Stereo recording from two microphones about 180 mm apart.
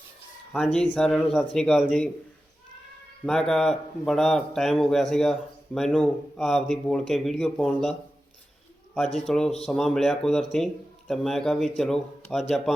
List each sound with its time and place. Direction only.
0.5 s a man's voice: 5° left (ahead or behind)
3.2 s a man's voice: 5° left (ahead or behind)
9.1 s a man's voice: centre (ahead or behind)